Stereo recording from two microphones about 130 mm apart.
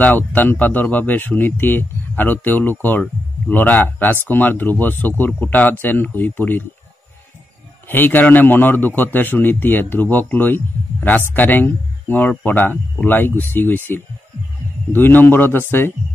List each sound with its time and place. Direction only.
0.0 s a man's voice: 15° left (ahead or behind)
7.9 s a man's voice: 15° left (ahead or behind)
14.9 s a man's voice: 15° left (ahead or behind)